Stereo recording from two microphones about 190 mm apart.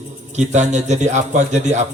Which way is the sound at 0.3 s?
40° right (ahead or behind).